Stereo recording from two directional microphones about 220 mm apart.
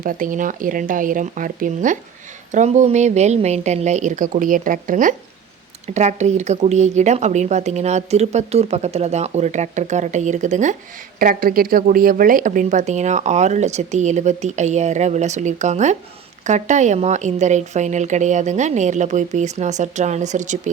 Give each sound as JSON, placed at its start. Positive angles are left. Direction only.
{"t": 0.0, "sound": "speech", "side_deg": -40}